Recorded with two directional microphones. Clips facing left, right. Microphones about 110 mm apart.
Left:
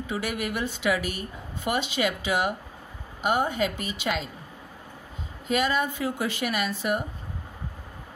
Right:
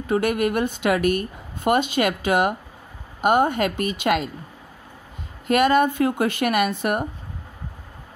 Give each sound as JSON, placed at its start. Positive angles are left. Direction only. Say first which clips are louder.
{"t": 0.0, "sound": "a woman's voice", "louder": "right 9 dB", "side_deg": -50}
{"t": 5.5, "sound": "speech", "louder": "right 8 dB", "side_deg": -55}